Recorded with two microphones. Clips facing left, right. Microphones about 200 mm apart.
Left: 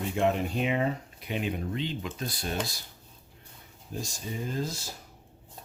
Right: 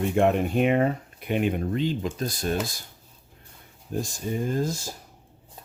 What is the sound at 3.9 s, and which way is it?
Speech, 55° right (ahead or behind).